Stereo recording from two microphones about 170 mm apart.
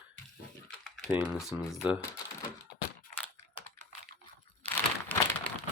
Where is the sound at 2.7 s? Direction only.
70° left (ahead or behind).